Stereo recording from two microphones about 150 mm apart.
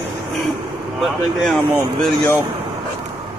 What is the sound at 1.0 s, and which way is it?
Speech, centre (ahead or behind).